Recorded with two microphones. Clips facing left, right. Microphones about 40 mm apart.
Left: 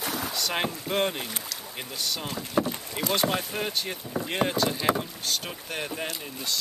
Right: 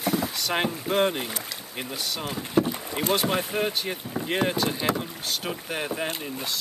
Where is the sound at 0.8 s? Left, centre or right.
Centre.